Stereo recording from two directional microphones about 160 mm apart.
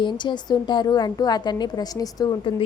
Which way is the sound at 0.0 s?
30° left (ahead or behind).